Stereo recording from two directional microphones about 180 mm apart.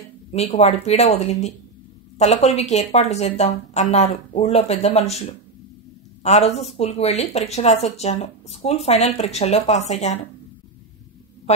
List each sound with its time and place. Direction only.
0.3 s speech: 35° left (ahead or behind)